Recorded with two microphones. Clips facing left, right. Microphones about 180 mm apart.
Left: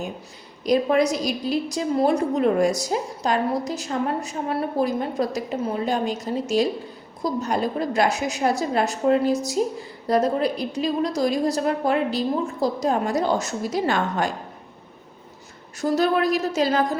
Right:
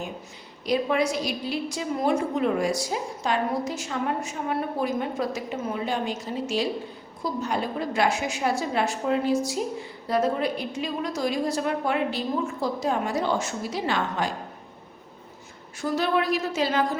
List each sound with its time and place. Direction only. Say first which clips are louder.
0.6 s a woman's voice: left 5 dB; 40° left (ahead or behind)
15.8 s a woman's voice: left 4 dB; 40° left (ahead or behind)